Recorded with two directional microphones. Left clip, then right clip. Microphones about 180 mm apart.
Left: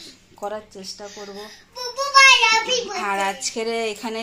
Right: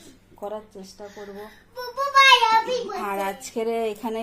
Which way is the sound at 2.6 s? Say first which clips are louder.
Left 4 dB; 5° right (ahead or behind).